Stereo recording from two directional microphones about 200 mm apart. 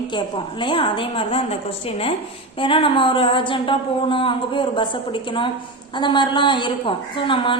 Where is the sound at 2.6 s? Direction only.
25° left (ahead or behind).